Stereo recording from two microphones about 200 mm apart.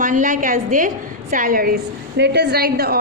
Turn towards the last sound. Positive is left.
turn(degrees=-50)  # may be behind; listen again after turning